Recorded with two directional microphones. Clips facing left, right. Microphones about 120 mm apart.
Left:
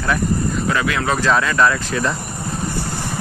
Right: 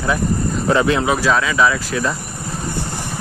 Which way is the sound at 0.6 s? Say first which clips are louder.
Right 8 dB; 25° right (ahead or behind).